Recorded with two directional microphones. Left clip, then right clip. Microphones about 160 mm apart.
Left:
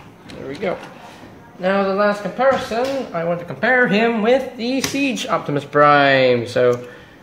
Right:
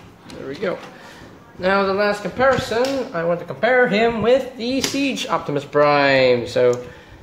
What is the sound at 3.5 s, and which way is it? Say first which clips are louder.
Speech: left 1 dB; 5° left (ahead or behind).